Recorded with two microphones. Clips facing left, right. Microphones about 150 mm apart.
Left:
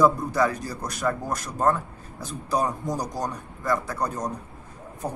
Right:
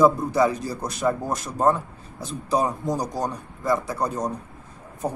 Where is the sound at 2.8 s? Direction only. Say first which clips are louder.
Right 3 dB; 20° right (ahead or behind).